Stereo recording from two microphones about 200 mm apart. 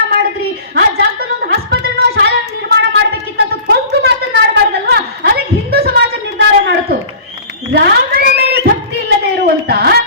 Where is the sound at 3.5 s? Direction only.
55° right (ahead or behind).